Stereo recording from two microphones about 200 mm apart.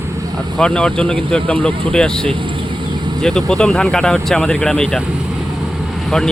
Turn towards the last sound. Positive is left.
turn(degrees=5)  # may be behind; listen again after turning